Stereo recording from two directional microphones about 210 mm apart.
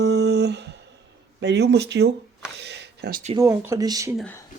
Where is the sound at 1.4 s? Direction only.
55° right (ahead or behind).